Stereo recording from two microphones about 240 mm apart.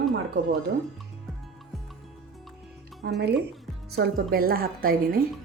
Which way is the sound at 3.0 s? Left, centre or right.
Right.